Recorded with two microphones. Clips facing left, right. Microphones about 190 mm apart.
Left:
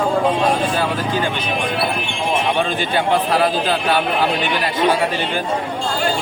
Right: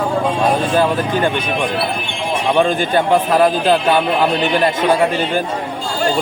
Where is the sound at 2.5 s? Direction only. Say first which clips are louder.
Right 5 dB; 45° right (ahead or behind).